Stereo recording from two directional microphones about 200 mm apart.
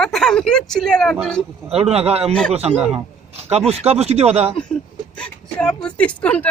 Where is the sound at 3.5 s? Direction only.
30° right (ahead or behind).